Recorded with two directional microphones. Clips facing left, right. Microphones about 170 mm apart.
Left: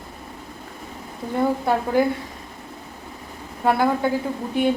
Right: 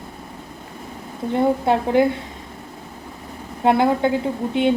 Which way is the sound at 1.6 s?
20° right (ahead or behind).